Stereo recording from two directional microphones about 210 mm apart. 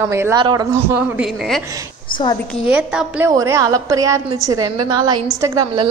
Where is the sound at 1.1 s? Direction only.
5° right (ahead or behind).